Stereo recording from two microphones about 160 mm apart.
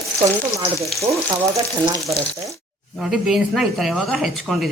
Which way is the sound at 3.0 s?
Centre (ahead or behind).